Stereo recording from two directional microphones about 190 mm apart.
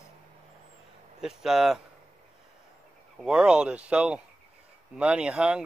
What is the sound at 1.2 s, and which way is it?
Speech, centre (ahead or behind).